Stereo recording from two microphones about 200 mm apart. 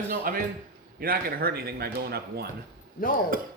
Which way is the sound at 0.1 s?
45° right (ahead or behind).